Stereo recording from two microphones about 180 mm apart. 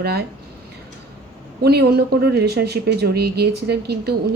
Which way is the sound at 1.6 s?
65° right (ahead or behind).